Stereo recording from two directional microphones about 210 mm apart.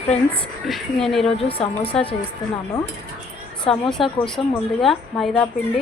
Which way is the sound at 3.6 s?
Centre (ahead or behind).